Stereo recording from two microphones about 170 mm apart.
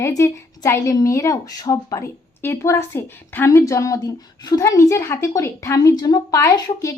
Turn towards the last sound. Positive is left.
turn(degrees=15)  # may be behind; listen again after turning